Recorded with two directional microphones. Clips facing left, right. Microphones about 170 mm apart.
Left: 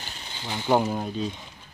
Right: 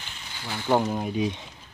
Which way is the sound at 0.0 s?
30° left (ahead or behind).